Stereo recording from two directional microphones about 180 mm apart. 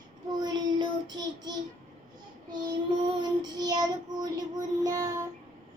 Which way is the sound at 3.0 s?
25° right (ahead or behind).